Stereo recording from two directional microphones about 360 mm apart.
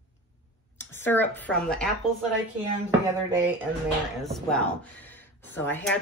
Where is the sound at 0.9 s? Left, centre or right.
Centre.